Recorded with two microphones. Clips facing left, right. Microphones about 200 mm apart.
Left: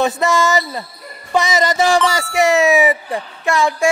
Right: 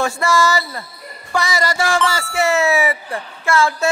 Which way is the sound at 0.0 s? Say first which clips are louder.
Left 2 dB; 20° left (ahead or behind).